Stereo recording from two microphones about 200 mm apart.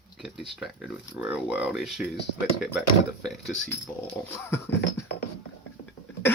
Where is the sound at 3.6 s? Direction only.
10° left (ahead or behind).